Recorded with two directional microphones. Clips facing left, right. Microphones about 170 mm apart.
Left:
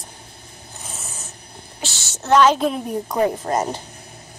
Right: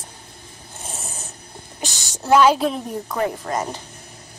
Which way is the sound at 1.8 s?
15° right (ahead or behind).